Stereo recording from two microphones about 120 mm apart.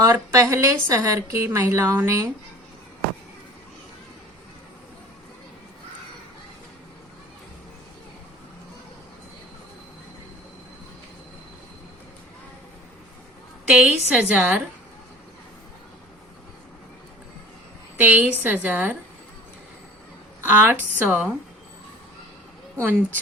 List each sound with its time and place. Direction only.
0.0 s a woman's voice: 25° right (ahead or behind)
13.7 s a woman's voice: 10° right (ahead or behind)
17.9 s a woman's voice: 15° right (ahead or behind)
20.4 s a woman's voice: 15° right (ahead or behind)
22.8 s a woman's voice: 15° right (ahead or behind)